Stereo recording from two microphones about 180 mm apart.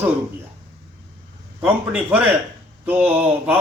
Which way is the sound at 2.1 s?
10° right (ahead or behind).